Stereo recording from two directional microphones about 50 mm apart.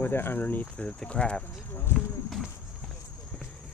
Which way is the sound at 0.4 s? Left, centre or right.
Left.